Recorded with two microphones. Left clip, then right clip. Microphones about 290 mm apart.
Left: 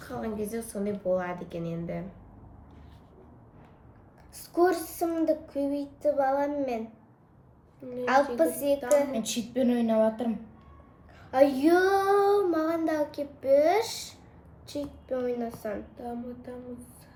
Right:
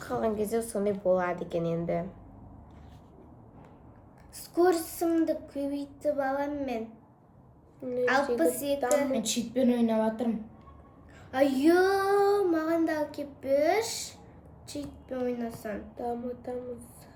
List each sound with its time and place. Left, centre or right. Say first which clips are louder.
0.0 s a woman's voice: right 5 dB; centre
4.4 s child singing: even; centre
8.4 s child singing: left 2 dB; centre
9.1 s speech: even; centre
11.3 s child singing: left 2 dB; centre
16.0 s a woman's voice: right 4 dB; centre